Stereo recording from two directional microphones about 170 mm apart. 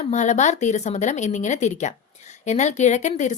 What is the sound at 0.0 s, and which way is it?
Speech, 45° left (ahead or behind).